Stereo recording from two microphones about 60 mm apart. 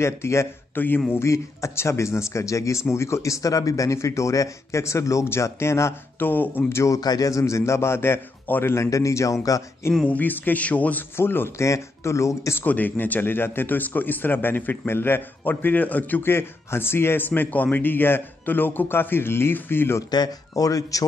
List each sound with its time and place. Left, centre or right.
0.0 s a man's voice: left
0.7 s speech: left
1.1 s a man's voice: left
6.1 s speech: left
6.7 s speech: left
7.0 s a man's voice: left
8.9 s speech: left
10.0 s a man's voice: left
11.1 s a man's voice: left
12.5 s speech: left
16.2 s speech: left
20.5 s speech: left